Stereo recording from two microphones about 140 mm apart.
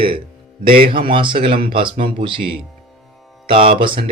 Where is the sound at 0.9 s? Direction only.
35° right (ahead or behind).